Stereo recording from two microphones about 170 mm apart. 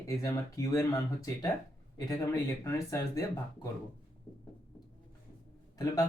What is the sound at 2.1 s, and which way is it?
Speech, 20° left (ahead or behind).